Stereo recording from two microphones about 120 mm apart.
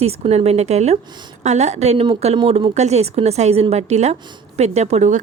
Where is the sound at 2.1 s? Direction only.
55° right (ahead or behind).